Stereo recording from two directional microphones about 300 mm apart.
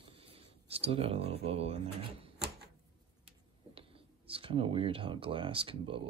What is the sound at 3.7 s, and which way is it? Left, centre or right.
Speech, centre.